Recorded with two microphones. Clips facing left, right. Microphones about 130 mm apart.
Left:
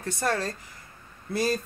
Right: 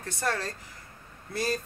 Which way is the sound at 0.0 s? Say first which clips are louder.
Left 3 dB; 5° left (ahead or behind).